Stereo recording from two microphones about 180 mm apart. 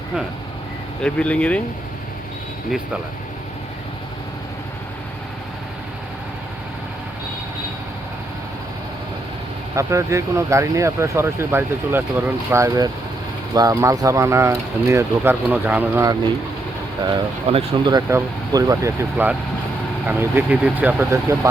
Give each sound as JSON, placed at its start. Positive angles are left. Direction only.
{"t": 1.0, "sound": "speech", "side_deg": 5}
{"t": 9.7, "sound": "speech", "side_deg": -15}
{"t": 17.2, "sound": "speech", "side_deg": -30}